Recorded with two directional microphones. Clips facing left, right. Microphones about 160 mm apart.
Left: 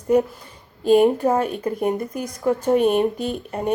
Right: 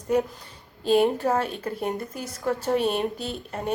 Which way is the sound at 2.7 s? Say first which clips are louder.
Left 7 dB; 55° left (ahead or behind).